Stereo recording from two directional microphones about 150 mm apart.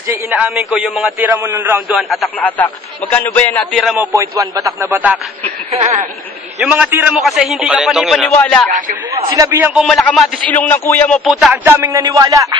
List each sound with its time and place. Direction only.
0.1 s speech: 10° right (ahead or behind)
1.9 s speech: centre (ahead or behind)
2.4 s a man's voice: 10° left (ahead or behind)
4.0 s speech: 20° right (ahead or behind)
4.8 s speech: 10° right (ahead or behind)
6.6 s speech: 10° right (ahead or behind)
7.2 s speech: centre (ahead or behind)
8.4 s a man's voice: 10° left (ahead or behind)
9.3 s speech: 20° right (ahead or behind)
9.8 s a man's voice: 5° left (ahead or behind)
11.2 s speech: 10° right (ahead or behind)